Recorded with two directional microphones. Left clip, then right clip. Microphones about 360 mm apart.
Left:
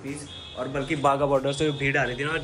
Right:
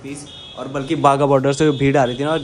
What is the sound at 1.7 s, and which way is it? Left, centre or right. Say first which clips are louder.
Speech: right 8 dB; right.